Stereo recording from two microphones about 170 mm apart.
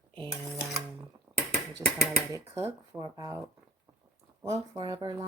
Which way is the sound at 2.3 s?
15° right (ahead or behind).